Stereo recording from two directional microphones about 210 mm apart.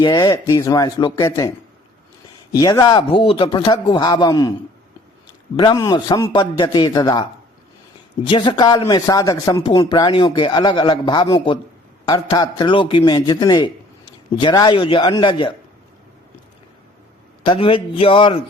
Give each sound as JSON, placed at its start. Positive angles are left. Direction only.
{"t": 0.0, "sound": "a man's voice", "side_deg": 20}
{"t": 5.5, "sound": "a man's voice", "side_deg": 15}
{"t": 17.4, "sound": "a man's voice", "side_deg": 25}